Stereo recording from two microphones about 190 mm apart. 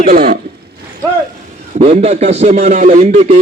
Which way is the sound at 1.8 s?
35° right (ahead or behind).